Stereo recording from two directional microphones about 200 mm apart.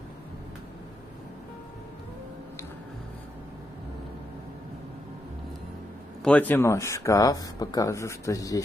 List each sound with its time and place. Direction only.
6.2 s speech: 10° left (ahead or behind)